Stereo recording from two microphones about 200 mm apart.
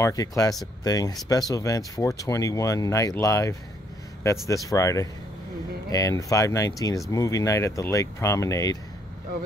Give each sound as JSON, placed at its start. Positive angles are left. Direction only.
{"t": 0.0, "sound": "speech", "side_deg": 15}